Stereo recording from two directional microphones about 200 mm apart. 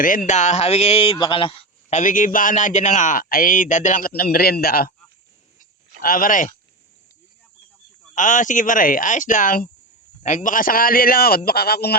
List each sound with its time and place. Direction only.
0.3 s a man's voice: 35° left (ahead or behind)
6.0 s a man's voice: 45° left (ahead or behind)
8.1 s a man's voice: 40° left (ahead or behind)